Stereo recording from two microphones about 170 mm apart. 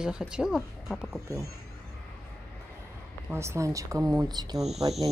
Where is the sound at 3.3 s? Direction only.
15° right (ahead or behind).